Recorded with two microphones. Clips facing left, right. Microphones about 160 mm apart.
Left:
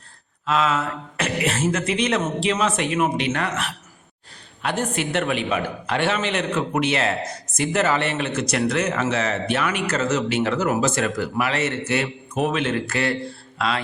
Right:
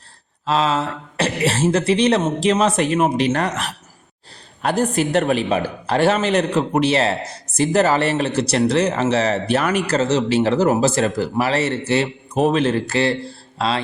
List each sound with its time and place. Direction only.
0.4 s a man's voice: 30° right (ahead or behind)